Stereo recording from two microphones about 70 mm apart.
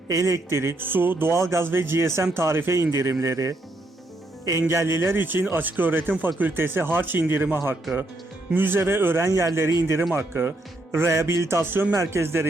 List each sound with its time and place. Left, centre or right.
0.1 s speech: right
4.6 s speech: right
9.2 s speech: right